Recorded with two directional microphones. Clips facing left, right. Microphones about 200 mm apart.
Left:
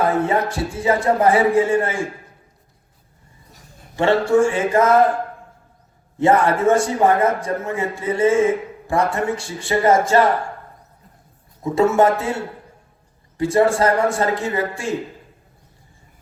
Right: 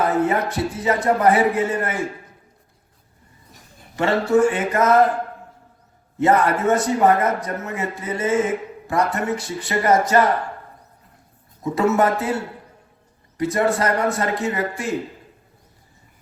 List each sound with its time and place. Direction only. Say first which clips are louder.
0.2 s a man's voice: even; 25° left (ahead or behind)
3.9 s a man's voice: left 2 dB; 25° left (ahead or behind)
6.1 s a man's voice: left 2 dB; 25° left (ahead or behind)
11.6 s a man's voice: left 3 dB; 25° left (ahead or behind)